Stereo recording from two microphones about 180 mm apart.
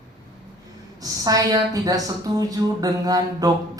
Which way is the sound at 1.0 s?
20° right (ahead or behind).